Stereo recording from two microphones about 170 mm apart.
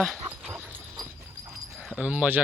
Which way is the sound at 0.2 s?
10° right (ahead or behind).